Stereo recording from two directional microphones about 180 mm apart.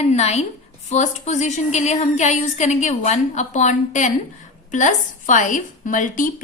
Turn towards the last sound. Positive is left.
turn(degrees=45)  # may be behind; listen again after turning